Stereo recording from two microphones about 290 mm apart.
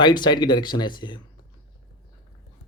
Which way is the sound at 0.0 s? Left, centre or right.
Centre.